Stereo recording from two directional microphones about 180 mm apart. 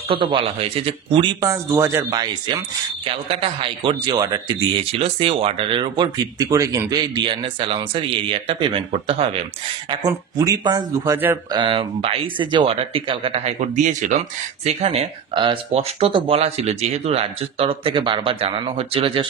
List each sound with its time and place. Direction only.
0.1 s a man's voice: 30° right (ahead or behind)
1.4 s a man's voice: 15° right (ahead or behind)
9.8 s a man's voice: 20° right (ahead or behind)